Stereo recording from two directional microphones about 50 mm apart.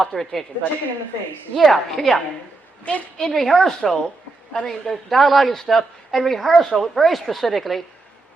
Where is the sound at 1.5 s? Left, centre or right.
Centre.